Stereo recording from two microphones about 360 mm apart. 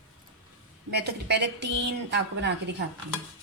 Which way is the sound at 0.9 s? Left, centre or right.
Right.